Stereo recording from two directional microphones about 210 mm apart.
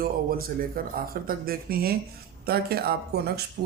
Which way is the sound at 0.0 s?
45° right (ahead or behind).